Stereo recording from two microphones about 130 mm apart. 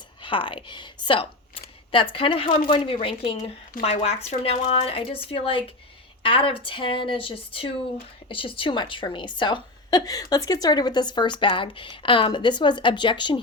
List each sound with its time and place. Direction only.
0.2 s a woman's voice: 40° left (ahead or behind)